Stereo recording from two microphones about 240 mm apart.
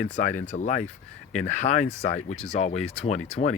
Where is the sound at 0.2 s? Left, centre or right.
Left.